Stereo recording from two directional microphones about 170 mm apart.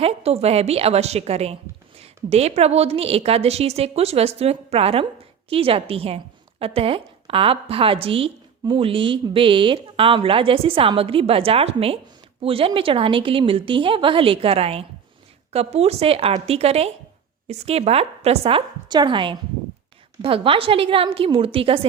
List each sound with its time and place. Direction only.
0.0 s a woman's voice: 35° right (ahead or behind)